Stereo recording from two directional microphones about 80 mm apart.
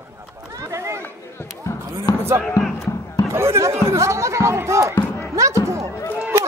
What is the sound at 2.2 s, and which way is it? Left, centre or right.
Speech, right.